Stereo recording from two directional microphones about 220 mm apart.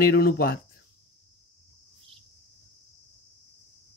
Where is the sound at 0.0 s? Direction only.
45° left (ahead or behind).